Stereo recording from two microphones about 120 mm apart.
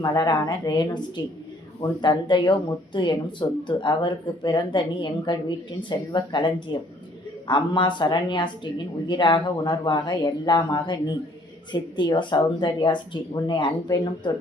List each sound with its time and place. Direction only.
0.0 s speech: 30° left (ahead or behind)